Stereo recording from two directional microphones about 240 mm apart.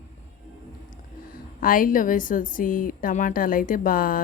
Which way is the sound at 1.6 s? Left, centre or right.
Left.